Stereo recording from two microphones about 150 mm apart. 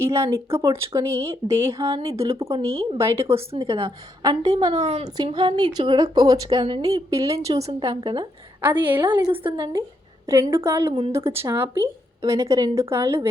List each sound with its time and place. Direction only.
0.0 s speech: 20° right (ahead or behind)
2.5 s a woman's voice: 40° right (ahead or behind)
3.0 s speech: 15° right (ahead or behind)
3.5 s a woman's voice: 40° right (ahead or behind)
4.2 s a woman's voice: 25° right (ahead or behind)
4.7 s a woman's voice: 45° right (ahead or behind)
5.1 s a woman's voice: 30° right (ahead or behind)
7.7 s a woman's voice: 35° right (ahead or behind)
8.6 s speech: 10° right (ahead or behind)
9.0 s a woman's voice: 35° right (ahead or behind)
10.5 s a woman's voice: 20° right (ahead or behind)